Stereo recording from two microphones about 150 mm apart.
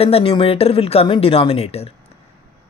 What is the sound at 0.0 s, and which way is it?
Speech, 40° left (ahead or behind).